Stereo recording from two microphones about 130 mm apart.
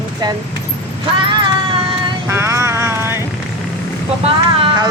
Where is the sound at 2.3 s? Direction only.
20° right (ahead or behind).